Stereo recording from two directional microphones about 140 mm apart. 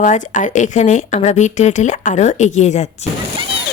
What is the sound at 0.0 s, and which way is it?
A woman's voice, 60° left (ahead or behind).